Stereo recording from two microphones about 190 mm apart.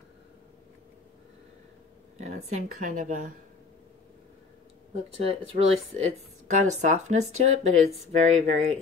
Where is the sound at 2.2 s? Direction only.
40° right (ahead or behind).